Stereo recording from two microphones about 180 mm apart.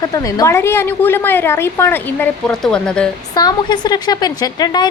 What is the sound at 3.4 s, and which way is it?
A woman's voice, 25° left (ahead or behind).